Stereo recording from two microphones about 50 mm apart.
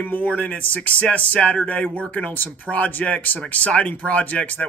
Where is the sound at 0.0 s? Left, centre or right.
Left.